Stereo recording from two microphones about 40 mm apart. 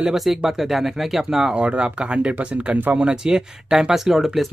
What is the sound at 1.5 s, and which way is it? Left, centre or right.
Speech, right.